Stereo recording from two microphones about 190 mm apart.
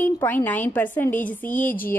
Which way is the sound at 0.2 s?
10° left (ahead or behind).